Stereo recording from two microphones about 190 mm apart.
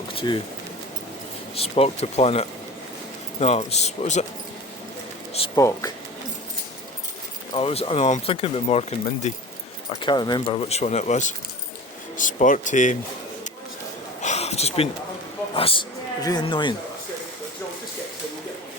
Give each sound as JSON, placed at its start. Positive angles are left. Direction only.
{"t": 0.1, "sound": "pigeon", "side_deg": 30}
{"t": 1.5, "sound": "speech", "side_deg": 30}
{"t": 5.5, "sound": "speech", "side_deg": 15}
{"t": 7.5, "sound": "speech", "side_deg": 30}
{"t": 14.2, "sound": "a sound", "side_deg": 35}
{"t": 15.5, "sound": "speech", "side_deg": 30}